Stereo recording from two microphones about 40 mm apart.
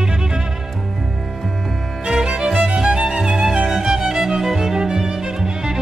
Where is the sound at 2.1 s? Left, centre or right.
Centre.